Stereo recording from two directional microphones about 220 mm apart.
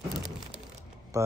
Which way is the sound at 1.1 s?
15° right (ahead or behind).